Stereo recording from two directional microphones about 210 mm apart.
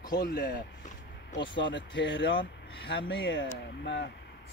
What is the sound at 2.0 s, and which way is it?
Speech, 60° left (ahead or behind).